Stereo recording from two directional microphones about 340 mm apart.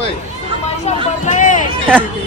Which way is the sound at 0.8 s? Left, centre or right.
Left.